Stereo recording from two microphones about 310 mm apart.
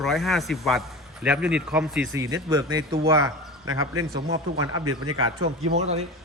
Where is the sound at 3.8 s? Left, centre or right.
Right.